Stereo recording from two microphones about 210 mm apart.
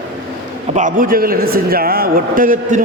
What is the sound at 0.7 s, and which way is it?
A man's voice, 35° right (ahead or behind).